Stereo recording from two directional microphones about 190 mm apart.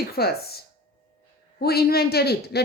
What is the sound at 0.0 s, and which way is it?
A woman's voice, 55° left (ahead or behind).